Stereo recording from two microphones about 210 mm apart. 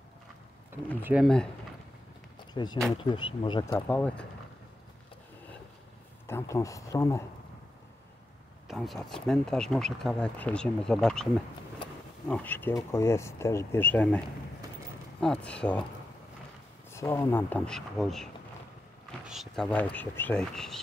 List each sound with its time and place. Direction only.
1.0 s speech: centre (ahead or behind)
2.5 s speech: 20° left (ahead or behind)
3.8 s speech: 5° left (ahead or behind)
6.2 s speech: 15° left (ahead or behind)
8.6 s speech: centre (ahead or behind)
16.9 s speech: 15° left (ahead or behind)